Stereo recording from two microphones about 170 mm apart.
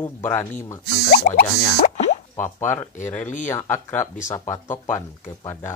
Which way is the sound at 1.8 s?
45° left (ahead or behind).